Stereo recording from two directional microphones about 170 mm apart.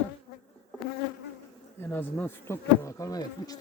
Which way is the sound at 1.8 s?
10° left (ahead or behind).